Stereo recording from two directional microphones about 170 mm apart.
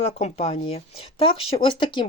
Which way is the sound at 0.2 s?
35° left (ahead or behind).